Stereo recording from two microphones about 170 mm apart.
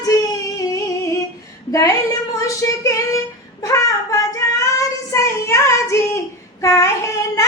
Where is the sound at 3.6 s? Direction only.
20° left (ahead or behind).